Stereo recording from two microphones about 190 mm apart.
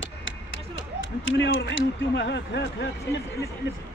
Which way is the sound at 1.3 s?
75° left (ahead or behind).